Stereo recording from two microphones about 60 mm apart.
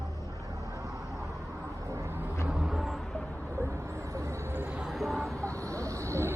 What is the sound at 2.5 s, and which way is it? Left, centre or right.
Vehicle, centre.